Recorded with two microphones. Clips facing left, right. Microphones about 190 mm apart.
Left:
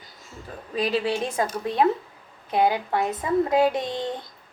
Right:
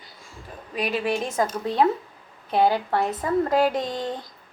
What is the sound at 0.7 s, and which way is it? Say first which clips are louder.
Speech: left 2 dB; 35° left (ahead or behind).